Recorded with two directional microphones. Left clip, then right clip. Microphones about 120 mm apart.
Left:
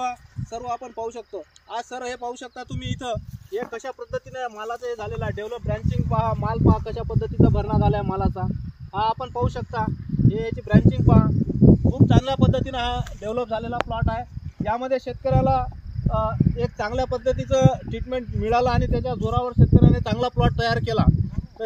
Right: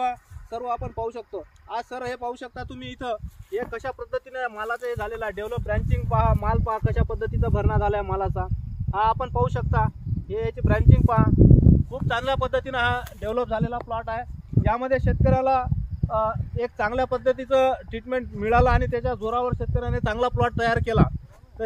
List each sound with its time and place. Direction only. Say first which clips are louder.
0.0 s speech: right 2 dB; 45° left (ahead or behind); by 11.3 s 15° left (ahead or behind)
11.9 s speech: left 3 dB; 25° left (ahead or behind)
18.4 s speech: right 1 dB; 25° left (ahead or behind)